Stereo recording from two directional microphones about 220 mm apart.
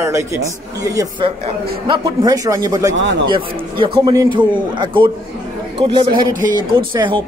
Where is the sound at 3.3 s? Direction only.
25° right (ahead or behind).